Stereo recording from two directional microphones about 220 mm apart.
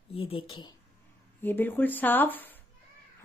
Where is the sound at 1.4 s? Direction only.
10° left (ahead or behind).